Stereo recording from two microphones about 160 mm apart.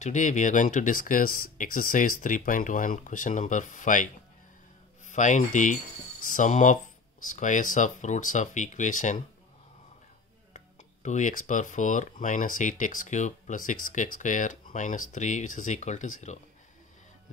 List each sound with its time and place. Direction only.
0.0 s speech: 50° left (ahead or behind)
10.5 s speech: 50° left (ahead or behind)